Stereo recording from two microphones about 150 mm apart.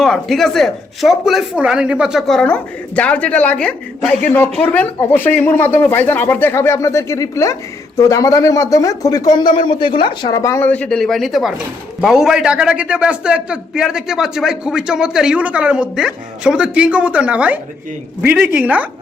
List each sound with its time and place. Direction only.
0.0 s speech: centre (ahead or behind); by 10.3 s 35° left (ahead or behind)
10.3 s a man's voice: 20° left (ahead or behind); by 18.9 s 10° right (ahead or behind)